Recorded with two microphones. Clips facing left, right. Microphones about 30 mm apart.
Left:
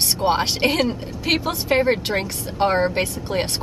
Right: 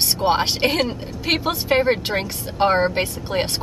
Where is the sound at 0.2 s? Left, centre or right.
Centre.